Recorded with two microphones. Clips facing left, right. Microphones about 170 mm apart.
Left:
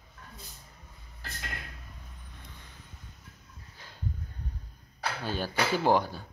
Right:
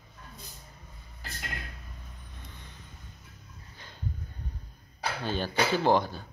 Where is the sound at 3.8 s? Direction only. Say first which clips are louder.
Right 1 dB; 5° left (ahead or behind).